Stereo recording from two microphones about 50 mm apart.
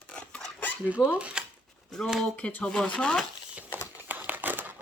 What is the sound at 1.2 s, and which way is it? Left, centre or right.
Speech, centre.